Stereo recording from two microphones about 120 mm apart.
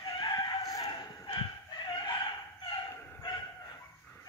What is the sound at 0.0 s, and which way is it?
Fowl, 40° left (ahead or behind).